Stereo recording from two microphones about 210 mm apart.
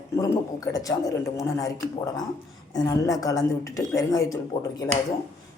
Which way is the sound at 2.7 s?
15° left (ahead or behind).